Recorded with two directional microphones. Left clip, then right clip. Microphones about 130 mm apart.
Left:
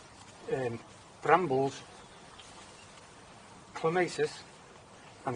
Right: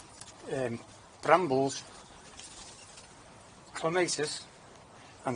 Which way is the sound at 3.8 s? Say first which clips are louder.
Even; 45° right (ahead or behind).